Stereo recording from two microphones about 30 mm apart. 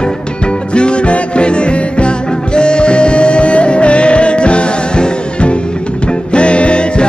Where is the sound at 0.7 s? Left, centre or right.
Left.